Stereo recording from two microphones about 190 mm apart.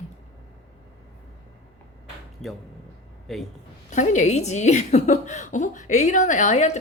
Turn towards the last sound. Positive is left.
turn(degrees=40)  # may be behind; listen again after turning